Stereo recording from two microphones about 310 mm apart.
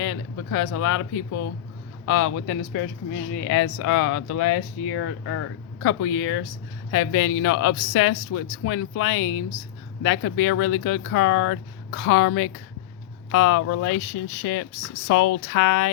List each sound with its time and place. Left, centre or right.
0.0 s speech: left
7.2 s speech: left
7.4 s speech: left